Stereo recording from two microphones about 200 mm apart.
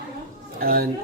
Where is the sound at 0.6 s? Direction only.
50° right (ahead or behind).